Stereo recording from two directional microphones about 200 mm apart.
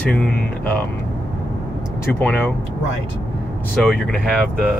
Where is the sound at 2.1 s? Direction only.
10° left (ahead or behind).